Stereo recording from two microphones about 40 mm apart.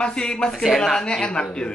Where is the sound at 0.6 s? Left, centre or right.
Centre.